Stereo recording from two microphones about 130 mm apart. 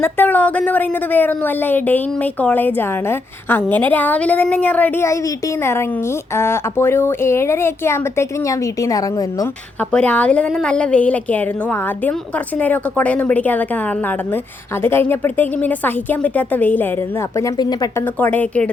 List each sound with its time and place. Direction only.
0.0 s a woman's voice: 15° left (ahead or behind)
6.3 s speech: 20° left (ahead or behind)
9.9 s a woman's voice: 10° left (ahead or behind)
14.8 s a woman's voice: 15° left (ahead or behind)
17.3 s speech: 30° left (ahead or behind)
18.2 s a woman's voice: 10° left (ahead or behind)